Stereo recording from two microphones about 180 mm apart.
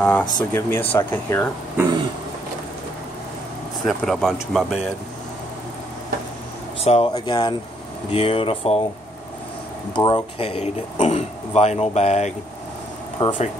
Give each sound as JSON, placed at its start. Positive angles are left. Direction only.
{"t": 0.0, "sound": "speech", "side_deg": 5}
{"t": 3.8, "sound": "speech", "side_deg": 0}
{"t": 6.8, "sound": "speech", "side_deg": 35}
{"t": 9.9, "sound": "speech", "side_deg": 25}